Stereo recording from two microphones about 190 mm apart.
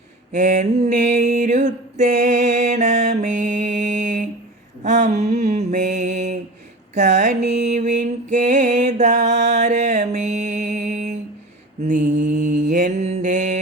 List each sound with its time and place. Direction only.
0.3 s mantra: 40° right (ahead or behind)
4.8 s a sound: 40° right (ahead or behind)
5.5 s mantra: 40° right (ahead or behind)
6.9 s music: 40° right (ahead or behind)
11.9 s mantra: 40° right (ahead or behind)